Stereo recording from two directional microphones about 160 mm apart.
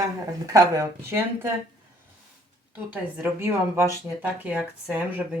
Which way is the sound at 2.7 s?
10° right (ahead or behind).